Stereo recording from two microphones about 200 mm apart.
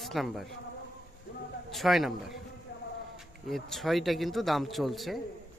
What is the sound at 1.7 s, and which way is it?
Speech, centre (ahead or behind).